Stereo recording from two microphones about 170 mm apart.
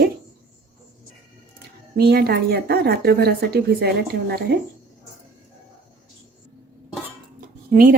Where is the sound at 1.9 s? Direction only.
65° right (ahead or behind).